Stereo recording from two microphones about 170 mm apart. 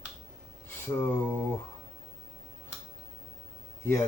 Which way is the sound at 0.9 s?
15° left (ahead or behind).